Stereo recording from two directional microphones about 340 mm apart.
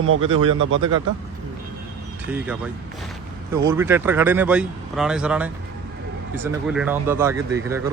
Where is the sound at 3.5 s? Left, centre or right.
Centre.